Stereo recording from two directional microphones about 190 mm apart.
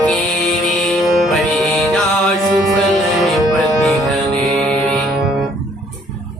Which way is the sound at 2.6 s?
Centre (ahead or behind).